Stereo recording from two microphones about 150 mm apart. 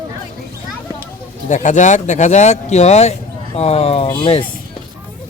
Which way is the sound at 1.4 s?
55° left (ahead or behind).